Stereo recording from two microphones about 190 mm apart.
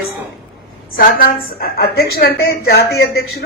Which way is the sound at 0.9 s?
50° left (ahead or behind).